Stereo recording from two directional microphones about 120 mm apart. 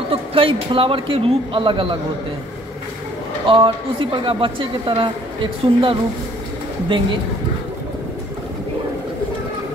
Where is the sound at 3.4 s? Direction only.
45° right (ahead or behind).